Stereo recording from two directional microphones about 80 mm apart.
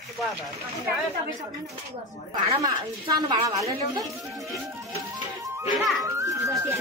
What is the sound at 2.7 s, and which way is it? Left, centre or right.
A woman's voice, right.